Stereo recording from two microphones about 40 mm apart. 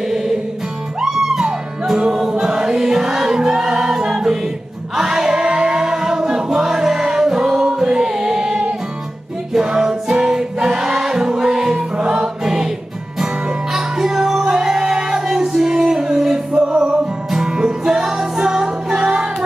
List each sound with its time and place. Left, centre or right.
0.1 s music: centre
4.9 s choir: centre
9.7 s music: centre
13.7 s music: centre